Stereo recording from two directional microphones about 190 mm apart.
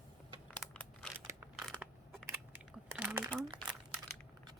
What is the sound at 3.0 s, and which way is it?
Crumpling, 5° right (ahead or behind).